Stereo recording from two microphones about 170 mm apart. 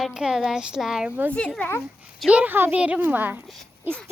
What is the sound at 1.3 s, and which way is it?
Speech, 5° left (ahead or behind).